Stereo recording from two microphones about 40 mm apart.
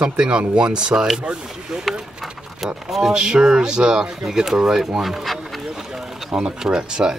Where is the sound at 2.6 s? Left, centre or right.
Centre.